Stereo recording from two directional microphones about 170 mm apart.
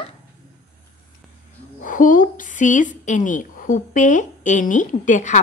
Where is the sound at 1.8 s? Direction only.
50° left (ahead or behind).